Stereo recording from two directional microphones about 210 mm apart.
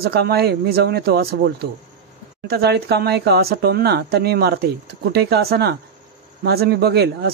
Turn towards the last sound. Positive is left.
turn(degrees=-50)  # may be behind; listen again after turning